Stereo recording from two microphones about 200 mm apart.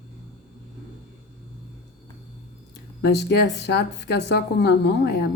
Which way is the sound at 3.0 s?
60° left (ahead or behind).